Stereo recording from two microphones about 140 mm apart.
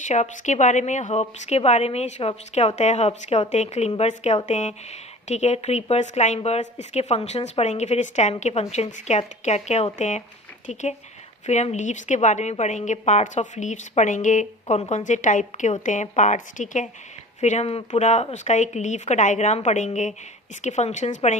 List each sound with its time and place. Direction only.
0.0 s a woman's voice: 55° left (ahead or behind)